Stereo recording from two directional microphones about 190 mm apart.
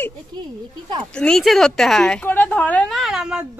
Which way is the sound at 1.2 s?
Centre (ahead or behind).